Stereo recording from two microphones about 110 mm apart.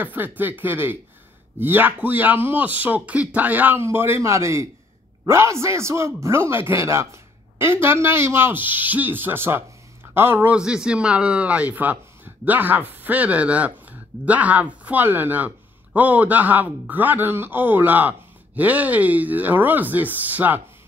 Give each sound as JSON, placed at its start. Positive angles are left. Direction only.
{"t": 0.0, "sound": "speech", "side_deg": -15}